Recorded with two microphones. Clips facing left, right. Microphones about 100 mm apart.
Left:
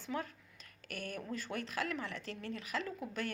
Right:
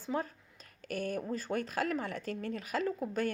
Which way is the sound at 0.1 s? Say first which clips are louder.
Right 5 dB; 30° right (ahead or behind).